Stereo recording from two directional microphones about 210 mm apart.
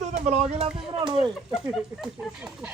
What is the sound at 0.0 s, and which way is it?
Speech, 30° right (ahead or behind).